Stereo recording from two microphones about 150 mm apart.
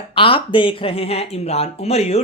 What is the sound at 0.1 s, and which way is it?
Speech, 35° left (ahead or behind).